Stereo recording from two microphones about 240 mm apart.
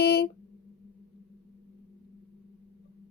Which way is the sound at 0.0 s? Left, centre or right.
Left.